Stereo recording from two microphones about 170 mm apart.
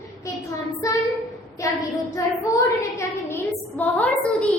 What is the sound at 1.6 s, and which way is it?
Child singing, 20° left (ahead or behind).